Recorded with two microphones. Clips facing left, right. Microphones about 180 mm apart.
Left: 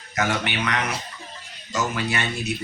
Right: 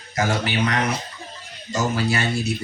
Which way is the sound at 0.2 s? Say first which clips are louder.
Right 3 dB; 30° right (ahead or behind).